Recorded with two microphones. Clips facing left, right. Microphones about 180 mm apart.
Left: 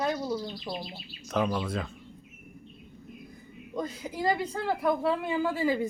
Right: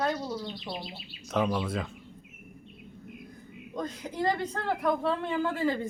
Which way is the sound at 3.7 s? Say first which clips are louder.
Even; 5° left (ahead or behind).